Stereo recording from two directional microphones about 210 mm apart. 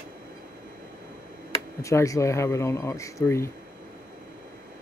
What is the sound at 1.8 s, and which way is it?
Speech, 15° left (ahead or behind).